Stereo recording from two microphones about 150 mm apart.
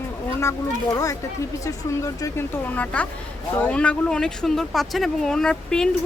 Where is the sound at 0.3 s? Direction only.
20° left (ahead or behind).